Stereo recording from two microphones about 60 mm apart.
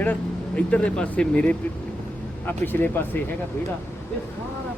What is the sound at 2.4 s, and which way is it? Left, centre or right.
Speech, left.